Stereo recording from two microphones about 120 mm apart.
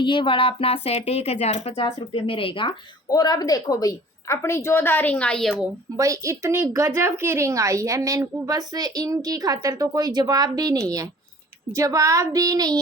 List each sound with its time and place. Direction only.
0.0 s speech: 45° left (ahead or behind); by 1.9 s 60° left (ahead or behind)
2.0 s speech: 45° left (ahead or behind)
3.1 s a woman's voice: 35° left (ahead or behind); by 5.6 s centre (ahead or behind)
6.0 s a woman's voice: 25° right (ahead or behind)